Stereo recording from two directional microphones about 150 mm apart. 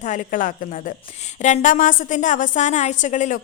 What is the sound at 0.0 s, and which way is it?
A woman's voice, 60° left (ahead or behind).